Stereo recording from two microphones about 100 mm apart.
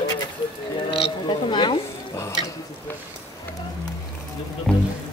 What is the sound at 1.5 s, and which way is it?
Speech, 50° left (ahead or behind).